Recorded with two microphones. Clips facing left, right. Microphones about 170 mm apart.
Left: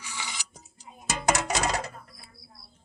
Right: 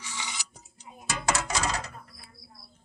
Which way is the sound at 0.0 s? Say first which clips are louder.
Even; 25° right (ahead or behind).